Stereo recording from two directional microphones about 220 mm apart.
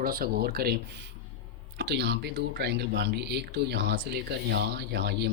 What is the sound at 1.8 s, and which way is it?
Speech, 50° right (ahead or behind).